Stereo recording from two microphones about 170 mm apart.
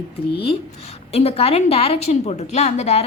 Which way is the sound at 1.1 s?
35° left (ahead or behind).